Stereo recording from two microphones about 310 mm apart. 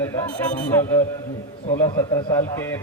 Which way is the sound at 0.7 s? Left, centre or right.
Centre.